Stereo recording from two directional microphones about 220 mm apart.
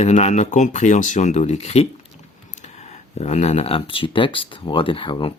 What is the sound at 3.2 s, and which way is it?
Speech, 30° left (ahead or behind).